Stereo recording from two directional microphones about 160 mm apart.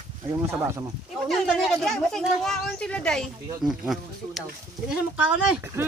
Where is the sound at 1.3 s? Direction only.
Centre (ahead or behind).